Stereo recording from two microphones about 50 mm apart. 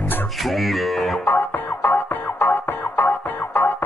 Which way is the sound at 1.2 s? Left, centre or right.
Left.